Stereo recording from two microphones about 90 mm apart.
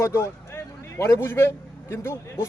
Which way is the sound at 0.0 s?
30° left (ahead or behind).